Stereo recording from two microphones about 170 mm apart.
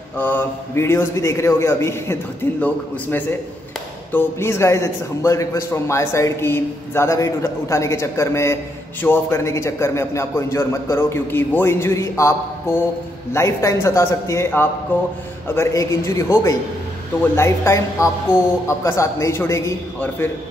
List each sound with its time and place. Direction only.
0.2 s a man's voice: 10° left (ahead or behind)